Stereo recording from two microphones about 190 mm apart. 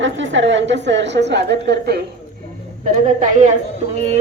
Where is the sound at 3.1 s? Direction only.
40° right (ahead or behind).